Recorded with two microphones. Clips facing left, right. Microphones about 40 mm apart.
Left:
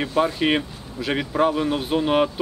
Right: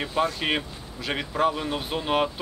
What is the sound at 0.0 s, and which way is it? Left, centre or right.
Speech, centre.